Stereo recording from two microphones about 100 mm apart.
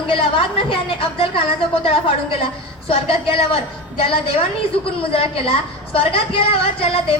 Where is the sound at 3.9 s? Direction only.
60° left (ahead or behind).